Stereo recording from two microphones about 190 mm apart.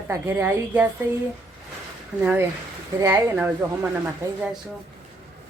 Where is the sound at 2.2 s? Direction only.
10° right (ahead or behind).